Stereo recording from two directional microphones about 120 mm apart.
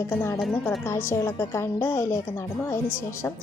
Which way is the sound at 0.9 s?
20° left (ahead or behind).